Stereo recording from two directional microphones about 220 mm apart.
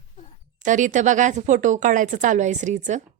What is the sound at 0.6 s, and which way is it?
Speech, 35° right (ahead or behind).